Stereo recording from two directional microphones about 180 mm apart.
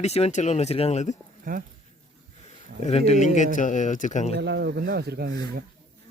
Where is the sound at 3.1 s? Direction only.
40° left (ahead or behind).